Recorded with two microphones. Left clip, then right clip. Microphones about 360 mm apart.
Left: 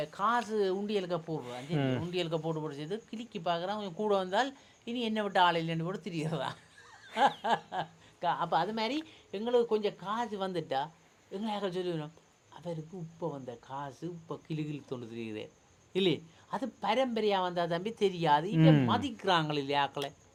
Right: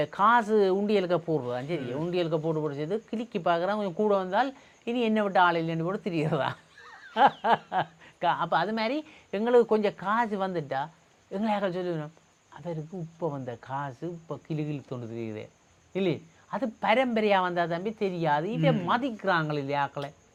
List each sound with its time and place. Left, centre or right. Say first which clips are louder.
0.0 s speech: right 8 dB; right
2.0 s speech: right 6 dB; centre
9.3 s speech: right 7 dB; right
10.5 s speech: right 3 dB; centre
11.3 s speech: right 7 dB; right; by 20.1 s centre